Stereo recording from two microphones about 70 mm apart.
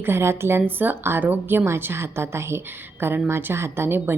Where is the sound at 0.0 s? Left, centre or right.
Right.